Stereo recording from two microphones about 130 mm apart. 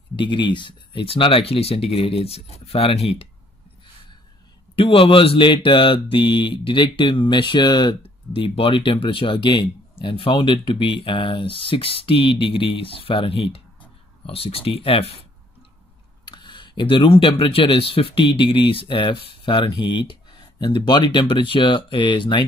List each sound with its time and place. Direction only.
0.1 s speech: 40° left (ahead or behind)
4.7 s speech: 45° left (ahead or behind)
8.4 s speech: 45° left (ahead or behind)
16.3 s speech: 35° left (ahead or behind)